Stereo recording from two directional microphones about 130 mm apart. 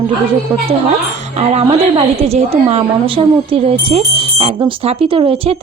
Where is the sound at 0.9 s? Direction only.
60° right (ahead or behind).